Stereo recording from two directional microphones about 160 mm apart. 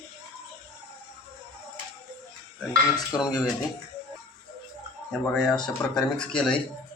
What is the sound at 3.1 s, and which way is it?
Speech, 25° left (ahead or behind).